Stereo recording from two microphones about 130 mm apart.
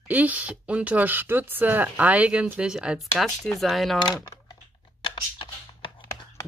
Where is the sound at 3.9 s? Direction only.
30° left (ahead or behind).